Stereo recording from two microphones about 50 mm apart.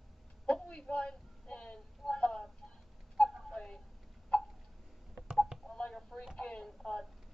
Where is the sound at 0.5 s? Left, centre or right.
Centre.